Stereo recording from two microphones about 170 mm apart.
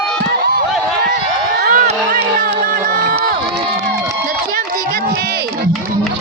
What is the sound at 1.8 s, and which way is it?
Crowd, 40° right (ahead or behind).